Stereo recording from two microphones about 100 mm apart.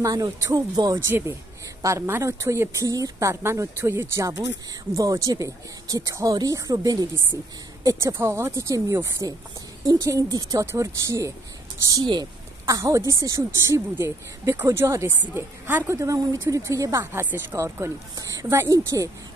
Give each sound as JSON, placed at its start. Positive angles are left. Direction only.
{"t": 0.0, "sound": "speech", "side_deg": -35}
{"t": 0.9, "sound": "speech", "side_deg": -25}
{"t": 8.0, "sound": "speech", "side_deg": -25}
{"t": 11.9, "sound": "a woman's voice", "side_deg": -45}
{"t": 15.9, "sound": "speech", "side_deg": -30}
{"t": 17.1, "sound": "speech", "side_deg": -20}